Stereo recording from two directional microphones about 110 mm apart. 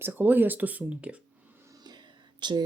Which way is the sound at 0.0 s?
15° right (ahead or behind).